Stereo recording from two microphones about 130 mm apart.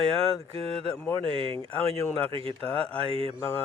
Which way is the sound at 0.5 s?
45° right (ahead or behind).